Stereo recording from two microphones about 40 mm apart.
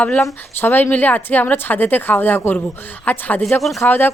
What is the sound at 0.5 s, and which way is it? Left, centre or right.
A woman's voice, left.